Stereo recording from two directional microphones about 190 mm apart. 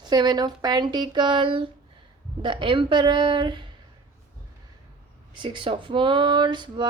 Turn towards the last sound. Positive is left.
turn(degrees=-25)  # may be behind; listen again after turning